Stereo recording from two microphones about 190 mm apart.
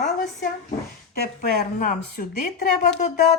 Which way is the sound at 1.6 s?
50° left (ahead or behind).